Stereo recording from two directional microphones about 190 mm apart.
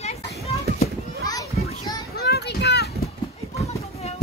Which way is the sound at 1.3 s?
20° left (ahead or behind).